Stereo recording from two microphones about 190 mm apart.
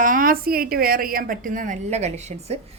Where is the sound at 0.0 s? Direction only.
45° right (ahead or behind).